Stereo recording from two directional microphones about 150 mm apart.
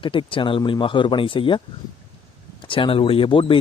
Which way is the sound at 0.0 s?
35° left (ahead or behind).